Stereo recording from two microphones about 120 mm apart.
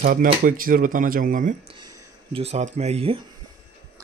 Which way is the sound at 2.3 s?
60° right (ahead or behind).